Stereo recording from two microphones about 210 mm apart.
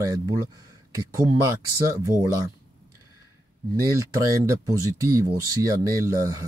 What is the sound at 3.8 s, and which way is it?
Speech, 15° right (ahead or behind).